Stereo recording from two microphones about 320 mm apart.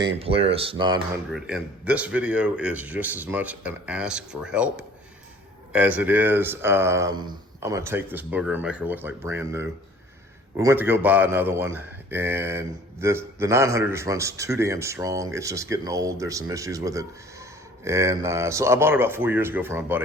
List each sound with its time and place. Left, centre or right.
0.0 s speech: centre
1.3 s speech: centre